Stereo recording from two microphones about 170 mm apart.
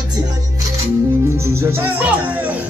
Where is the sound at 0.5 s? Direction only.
15° right (ahead or behind).